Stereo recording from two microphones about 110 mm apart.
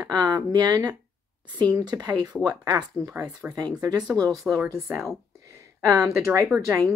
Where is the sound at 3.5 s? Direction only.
40° right (ahead or behind).